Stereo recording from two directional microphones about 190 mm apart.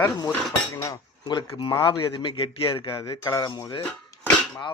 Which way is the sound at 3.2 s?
20° left (ahead or behind).